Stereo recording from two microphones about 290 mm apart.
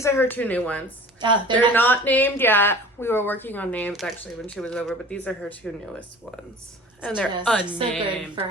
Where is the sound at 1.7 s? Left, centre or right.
Centre.